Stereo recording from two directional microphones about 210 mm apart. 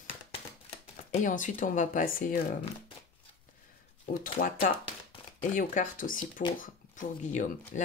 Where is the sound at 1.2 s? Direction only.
40° left (ahead or behind).